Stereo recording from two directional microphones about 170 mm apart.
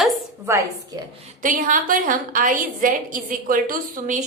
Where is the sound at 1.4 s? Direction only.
50° right (ahead or behind).